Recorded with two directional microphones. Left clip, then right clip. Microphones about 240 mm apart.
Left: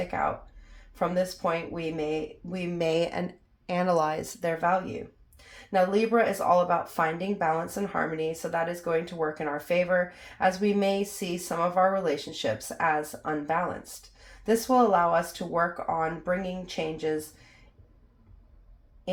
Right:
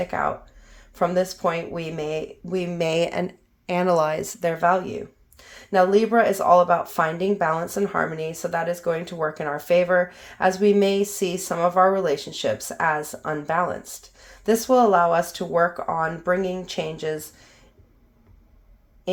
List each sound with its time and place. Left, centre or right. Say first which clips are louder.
0.9 s speech: right 6 dB; right